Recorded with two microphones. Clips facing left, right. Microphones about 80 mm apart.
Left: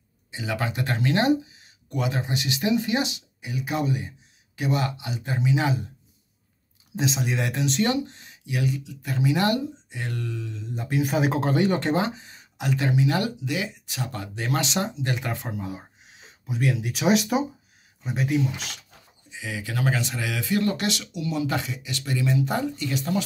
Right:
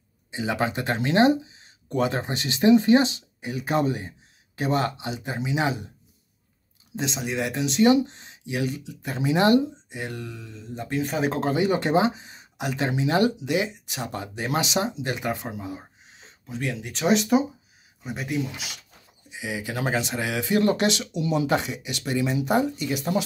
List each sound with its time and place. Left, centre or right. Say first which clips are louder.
0.3 s speech: right 3 dB; right
7.0 s speech: left 1 dB; centre
7.9 s speech: right 6 dB; right; by 18.8 s centre
19.3 s speech: right 1 dB; centre